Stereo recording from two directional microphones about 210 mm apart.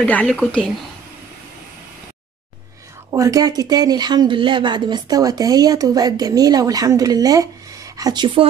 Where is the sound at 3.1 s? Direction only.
15° right (ahead or behind).